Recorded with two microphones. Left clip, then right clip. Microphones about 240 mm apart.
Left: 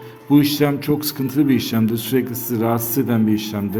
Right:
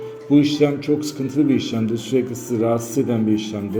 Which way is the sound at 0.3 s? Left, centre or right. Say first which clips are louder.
Even; left.